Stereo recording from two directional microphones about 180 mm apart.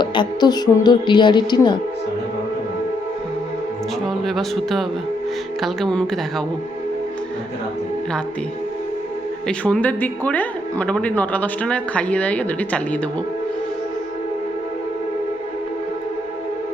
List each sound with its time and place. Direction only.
0.0 s speech: 25° left (ahead or behind)
4.0 s speech: centre (ahead or behind)
9.5 s speech: 5° left (ahead or behind)